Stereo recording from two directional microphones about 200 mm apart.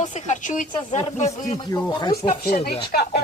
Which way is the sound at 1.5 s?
20° left (ahead or behind).